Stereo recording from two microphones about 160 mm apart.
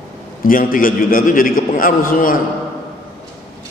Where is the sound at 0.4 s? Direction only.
60° left (ahead or behind).